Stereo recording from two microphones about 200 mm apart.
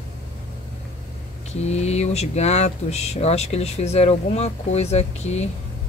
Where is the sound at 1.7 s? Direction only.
35° left (ahead or behind).